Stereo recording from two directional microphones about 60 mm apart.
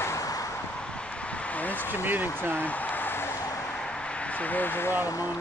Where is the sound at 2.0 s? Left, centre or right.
Right.